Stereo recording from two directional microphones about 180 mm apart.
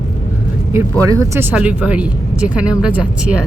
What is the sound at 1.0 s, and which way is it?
Speech, 15° right (ahead or behind).